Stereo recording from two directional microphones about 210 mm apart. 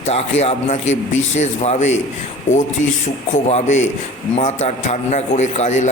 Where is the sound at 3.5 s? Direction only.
35° left (ahead or behind).